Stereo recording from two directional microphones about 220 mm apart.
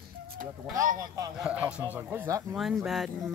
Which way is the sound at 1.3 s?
5° right (ahead or behind).